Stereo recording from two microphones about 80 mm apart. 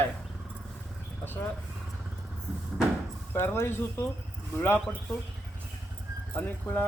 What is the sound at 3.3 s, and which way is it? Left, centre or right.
Speech, left.